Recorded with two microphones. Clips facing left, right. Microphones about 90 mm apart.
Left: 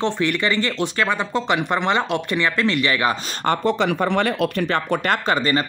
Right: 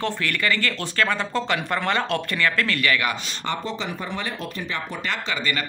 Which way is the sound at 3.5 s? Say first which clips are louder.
Left 9 dB; 65° left (ahead or behind).